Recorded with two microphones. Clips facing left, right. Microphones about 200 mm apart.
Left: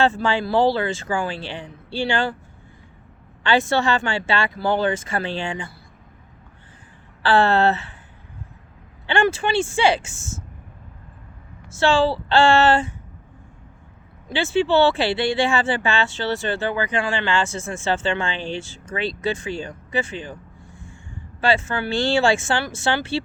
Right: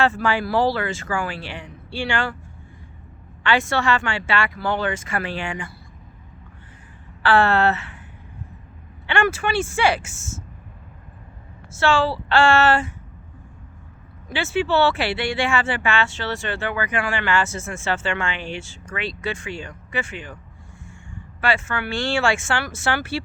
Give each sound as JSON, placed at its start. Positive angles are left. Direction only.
{"t": 0.0, "sound": "speech", "side_deg": 30}
{"t": 3.9, "sound": "speech", "side_deg": 35}
{"t": 7.2, "sound": "speech", "side_deg": 30}
{"t": 9.0, "sound": "speech", "side_deg": 30}
{"t": 11.9, "sound": "speech", "side_deg": 35}
{"t": 14.3, "sound": "speech", "side_deg": 30}